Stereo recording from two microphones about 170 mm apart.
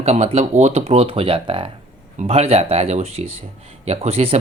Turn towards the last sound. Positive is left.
turn(degrees=-35)  # may be behind; listen again after turning